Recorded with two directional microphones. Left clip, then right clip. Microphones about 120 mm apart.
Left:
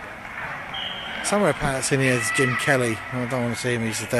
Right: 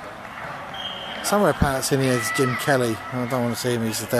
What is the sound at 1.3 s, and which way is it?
Speech, centre (ahead or behind).